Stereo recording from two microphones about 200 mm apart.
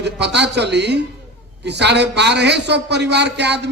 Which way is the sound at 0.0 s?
60° right (ahead or behind).